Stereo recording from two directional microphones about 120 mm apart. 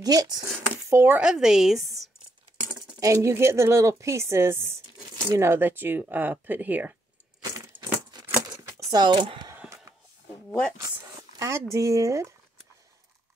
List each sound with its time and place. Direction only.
0.0 s speech: 30° right (ahead or behind)
0.8 s speech: 20° right (ahead or behind); by 2.0 s centre (ahead or behind)
3.0 s speech: 25° right (ahead or behind)
7.6 s a sound: 35° right (ahead or behind)
11.3 s speech: 25° right (ahead or behind)